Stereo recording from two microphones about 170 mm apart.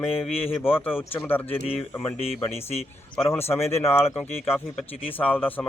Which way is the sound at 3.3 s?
15° left (ahead or behind).